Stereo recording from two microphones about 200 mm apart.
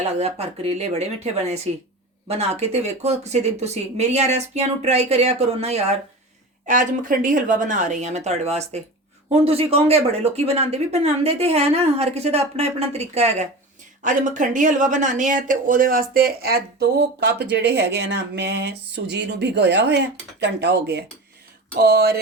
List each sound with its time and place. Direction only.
0.2 s speech: 30° right (ahead or behind); by 22.2 s 50° right (ahead or behind)